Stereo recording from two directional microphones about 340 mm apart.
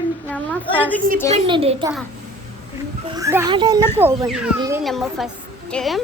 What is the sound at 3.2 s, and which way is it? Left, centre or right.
A woman's voice, centre.